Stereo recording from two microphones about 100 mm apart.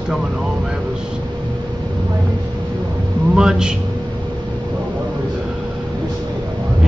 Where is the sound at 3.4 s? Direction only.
5° right (ahead or behind).